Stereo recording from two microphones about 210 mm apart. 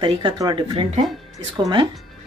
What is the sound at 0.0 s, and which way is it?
Speech, 20° right (ahead or behind).